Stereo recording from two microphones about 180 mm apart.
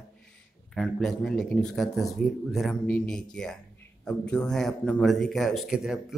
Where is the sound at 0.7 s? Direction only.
5° left (ahead or behind).